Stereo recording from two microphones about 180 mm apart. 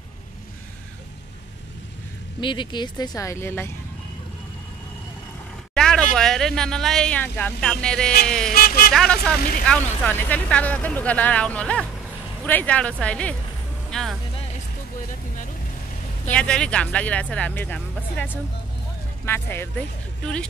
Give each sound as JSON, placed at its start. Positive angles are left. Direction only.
{"t": 2.4, "sound": "speech", "side_deg": 25}
{"t": 5.8, "sound": "speech", "side_deg": 5}
{"t": 8.5, "sound": "speech", "side_deg": 55}
{"t": 8.9, "sound": "speech", "side_deg": 5}
{"t": 13.8, "sound": "vehicle", "side_deg": 5}
{"t": 16.3, "sound": "speech", "side_deg": 5}